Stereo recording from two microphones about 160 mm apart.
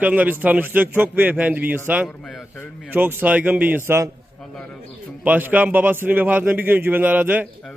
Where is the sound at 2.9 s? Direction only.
10° right (ahead or behind).